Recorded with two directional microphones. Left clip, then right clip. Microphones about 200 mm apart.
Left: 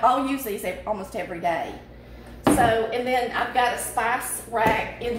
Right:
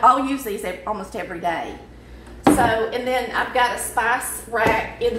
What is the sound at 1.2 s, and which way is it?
Speech, 15° left (ahead or behind).